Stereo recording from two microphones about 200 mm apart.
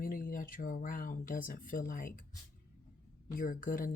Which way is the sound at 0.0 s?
45° left (ahead or behind).